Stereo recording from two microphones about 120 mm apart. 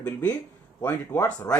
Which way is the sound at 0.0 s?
15° left (ahead or behind).